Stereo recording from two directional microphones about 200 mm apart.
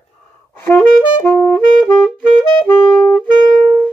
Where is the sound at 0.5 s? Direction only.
10° left (ahead or behind).